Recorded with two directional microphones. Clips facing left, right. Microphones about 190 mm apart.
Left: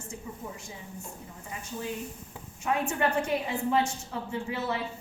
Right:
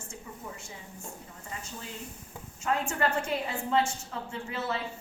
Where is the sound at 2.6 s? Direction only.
15° left (ahead or behind).